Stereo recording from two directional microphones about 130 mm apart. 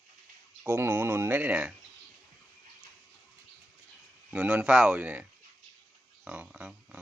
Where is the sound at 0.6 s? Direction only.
20° right (ahead or behind).